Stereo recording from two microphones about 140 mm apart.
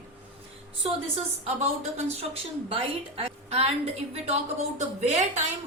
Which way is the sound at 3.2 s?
45° right (ahead or behind).